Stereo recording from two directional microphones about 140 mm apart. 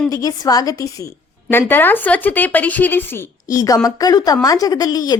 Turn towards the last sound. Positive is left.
turn(degrees=25)  # may be behind; listen again after turning